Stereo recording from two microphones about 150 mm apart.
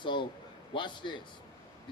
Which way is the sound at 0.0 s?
30° left (ahead or behind).